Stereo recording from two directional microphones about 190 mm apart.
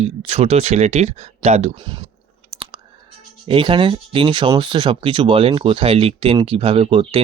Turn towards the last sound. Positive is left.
turn(degrees=-25)  # may be behind; listen again after turning